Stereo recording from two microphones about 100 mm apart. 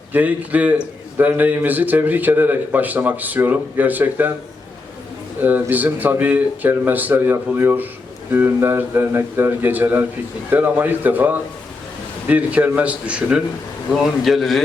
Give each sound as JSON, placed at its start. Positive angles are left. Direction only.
{"t": 0.1, "sound": "a man's voice", "side_deg": -15}
{"t": 5.4, "sound": "a man's voice", "side_deg": -20}
{"t": 13.9, "sound": "speech", "side_deg": 0}